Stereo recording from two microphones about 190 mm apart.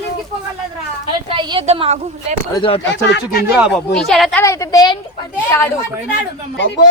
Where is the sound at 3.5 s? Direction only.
Centre (ahead or behind).